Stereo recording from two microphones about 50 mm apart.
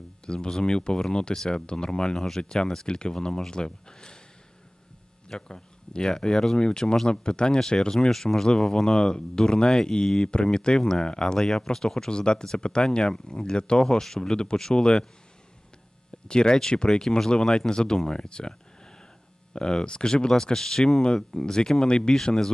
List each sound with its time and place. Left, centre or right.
0.3 s speech: centre
5.3 s speech: centre
16.3 s speech: centre